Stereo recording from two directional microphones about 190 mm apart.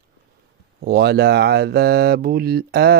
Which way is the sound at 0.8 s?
55° right (ahead or behind).